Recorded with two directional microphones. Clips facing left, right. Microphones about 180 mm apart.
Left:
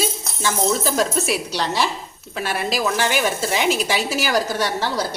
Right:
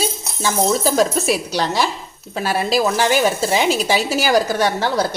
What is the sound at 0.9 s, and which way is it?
A woman's voice, 40° right (ahead or behind).